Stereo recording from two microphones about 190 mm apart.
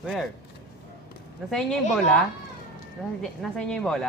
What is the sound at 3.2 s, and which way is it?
Speech, centre (ahead or behind).